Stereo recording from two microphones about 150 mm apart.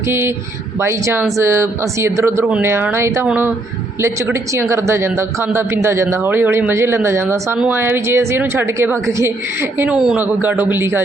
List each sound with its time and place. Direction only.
0.1 s speech: 15° right (ahead or behind)